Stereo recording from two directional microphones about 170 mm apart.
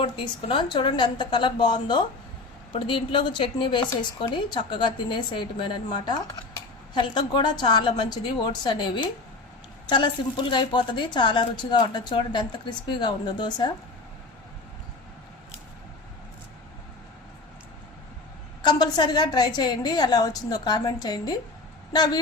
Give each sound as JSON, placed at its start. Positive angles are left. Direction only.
{"t": 0.0, "sound": "a woman's voice", "side_deg": 30}
{"t": 18.6, "sound": "a woman's voice", "side_deg": 25}